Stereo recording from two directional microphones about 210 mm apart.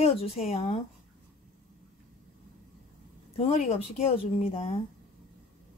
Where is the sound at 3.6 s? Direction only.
30° left (ahead or behind).